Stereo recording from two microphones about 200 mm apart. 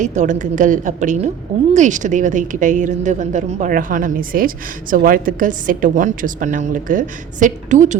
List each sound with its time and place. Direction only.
0.0 s a woman's voice: 35° right (ahead or behind)